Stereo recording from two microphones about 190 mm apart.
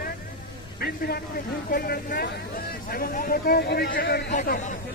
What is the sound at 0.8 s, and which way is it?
Speech, 55° left (ahead or behind).